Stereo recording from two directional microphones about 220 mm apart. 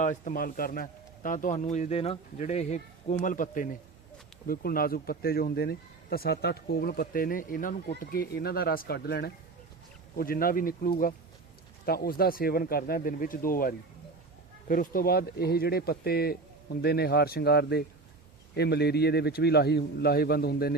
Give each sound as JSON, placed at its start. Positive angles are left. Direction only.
{"t": 0.0, "sound": "speech", "side_deg": 35}